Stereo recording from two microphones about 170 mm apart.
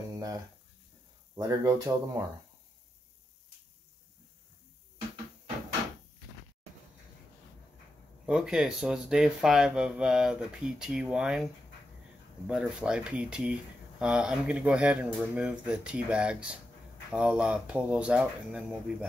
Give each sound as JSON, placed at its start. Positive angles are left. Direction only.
{"t": 1.3, "sound": "speech", "side_deg": -20}
{"t": 8.3, "sound": "speech", "side_deg": -5}
{"t": 12.4, "sound": "speech", "side_deg": -5}